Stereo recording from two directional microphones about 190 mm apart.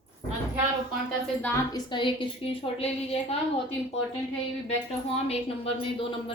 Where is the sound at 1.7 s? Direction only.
25° left (ahead or behind).